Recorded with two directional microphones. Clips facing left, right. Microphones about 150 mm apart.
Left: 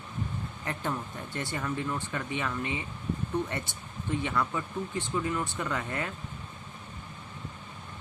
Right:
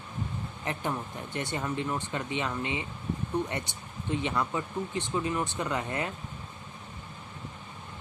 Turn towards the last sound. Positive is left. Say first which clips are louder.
# right 2 dB
turn(degrees=-20)  # may be behind; listen again after turning